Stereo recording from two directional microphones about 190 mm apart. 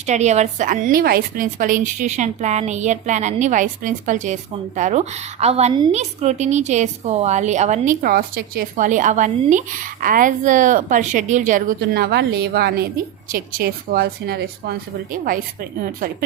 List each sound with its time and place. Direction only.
0.1 s a woman's voice: 35° right (ahead or behind)